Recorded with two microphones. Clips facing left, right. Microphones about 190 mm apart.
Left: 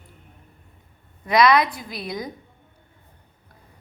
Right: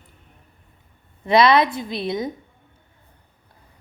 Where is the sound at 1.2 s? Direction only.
25° right (ahead or behind).